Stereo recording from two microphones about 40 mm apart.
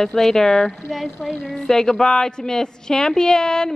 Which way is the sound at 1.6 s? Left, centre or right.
Centre.